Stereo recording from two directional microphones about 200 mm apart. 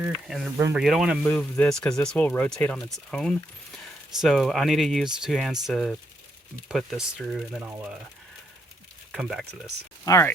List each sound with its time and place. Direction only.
0.0 s speech: centre (ahead or behind)
0.5 s speech: 15° right (ahead or behind)
0.8 s speech: centre (ahead or behind)
9.1 s speech: centre (ahead or behind)
10.1 s speech: 15° left (ahead or behind)